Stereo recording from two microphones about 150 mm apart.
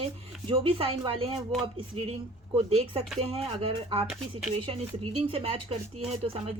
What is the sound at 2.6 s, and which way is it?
Speech, 40° right (ahead or behind).